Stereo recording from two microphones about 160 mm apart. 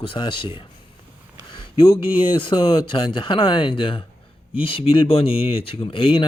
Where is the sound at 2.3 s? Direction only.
30° left (ahead or behind).